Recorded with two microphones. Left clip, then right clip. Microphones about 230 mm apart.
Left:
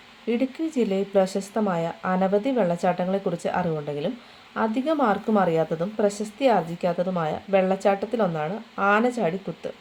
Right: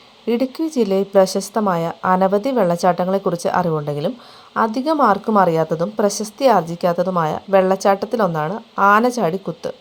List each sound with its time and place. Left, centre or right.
0.8 s a woman's voice: right
6.1 s a woman's voice: centre
6.4 s a woman's voice: right